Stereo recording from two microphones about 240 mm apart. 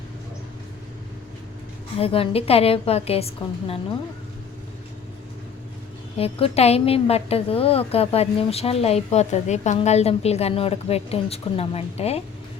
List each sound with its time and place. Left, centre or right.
2.0 s a woman's voice: left
6.1 s a woman's voice: left